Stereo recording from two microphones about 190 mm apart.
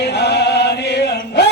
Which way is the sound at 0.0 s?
60° left (ahead or behind).